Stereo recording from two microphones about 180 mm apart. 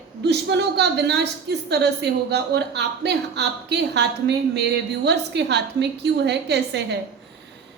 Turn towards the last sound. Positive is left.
turn(degrees=-70)  # may be behind; listen again after turning